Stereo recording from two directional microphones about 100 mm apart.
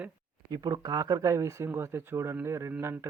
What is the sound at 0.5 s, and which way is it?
Speech, 40° right (ahead or behind).